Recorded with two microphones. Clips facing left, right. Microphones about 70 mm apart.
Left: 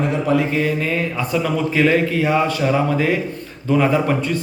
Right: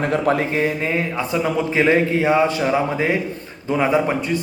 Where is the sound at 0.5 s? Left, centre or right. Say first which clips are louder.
Even; right.